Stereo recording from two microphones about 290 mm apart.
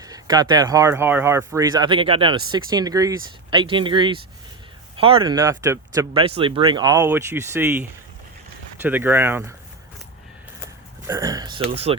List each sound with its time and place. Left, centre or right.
0.0 s speech: centre
11.0 s speech: centre